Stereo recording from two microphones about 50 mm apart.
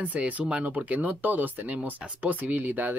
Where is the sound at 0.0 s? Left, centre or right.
Right.